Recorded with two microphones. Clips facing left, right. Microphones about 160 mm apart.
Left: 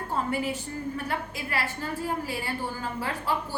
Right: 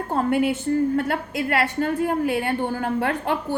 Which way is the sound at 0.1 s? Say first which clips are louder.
Right 8 dB; 60° right (ahead or behind).